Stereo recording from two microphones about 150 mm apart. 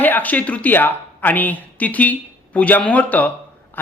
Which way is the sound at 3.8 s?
10° left (ahead or behind).